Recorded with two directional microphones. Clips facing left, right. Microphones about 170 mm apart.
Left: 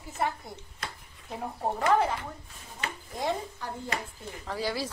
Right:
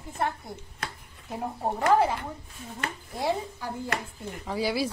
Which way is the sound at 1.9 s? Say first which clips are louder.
Right 3 dB; 10° right (ahead or behind).